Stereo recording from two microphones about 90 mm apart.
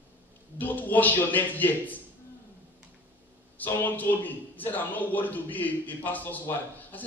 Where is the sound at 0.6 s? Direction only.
20° left (ahead or behind).